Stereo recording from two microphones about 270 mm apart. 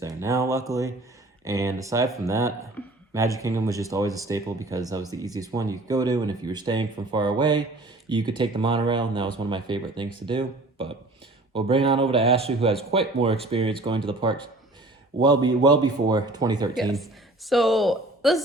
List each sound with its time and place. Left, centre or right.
0.0 s a sound: centre
0.7 s speech: centre
2.8 s speech: centre
3.1 s speech: centre
16.9 s a woman's voice: centre